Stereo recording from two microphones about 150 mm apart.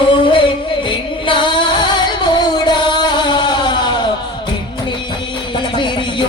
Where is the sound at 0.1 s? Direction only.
35° left (ahead or behind).